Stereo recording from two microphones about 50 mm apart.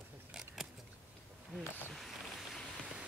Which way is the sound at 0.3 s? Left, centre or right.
Centre.